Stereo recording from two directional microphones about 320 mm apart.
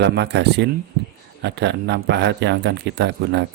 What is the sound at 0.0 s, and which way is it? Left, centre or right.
Speech, right.